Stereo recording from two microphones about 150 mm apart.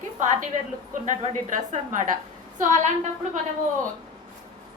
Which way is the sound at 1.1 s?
60° right (ahead or behind).